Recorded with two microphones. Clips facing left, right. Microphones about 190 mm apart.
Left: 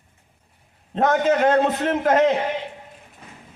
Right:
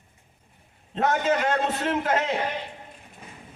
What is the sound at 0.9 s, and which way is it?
A man's voice, 45° left (ahead or behind).